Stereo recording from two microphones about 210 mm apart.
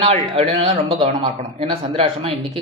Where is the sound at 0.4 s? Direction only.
30° right (ahead or behind).